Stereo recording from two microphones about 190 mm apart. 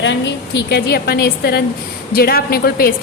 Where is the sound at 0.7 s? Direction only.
55° left (ahead or behind).